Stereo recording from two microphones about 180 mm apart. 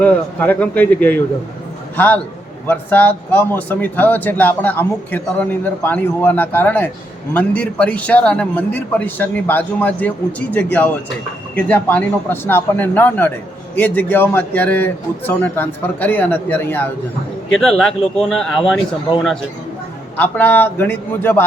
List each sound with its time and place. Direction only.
0.0 s a man's voice: 10° left (ahead or behind)
2.6 s a man's voice: 10° left (ahead or behind)
20.1 s a man's voice: 10° left (ahead or behind)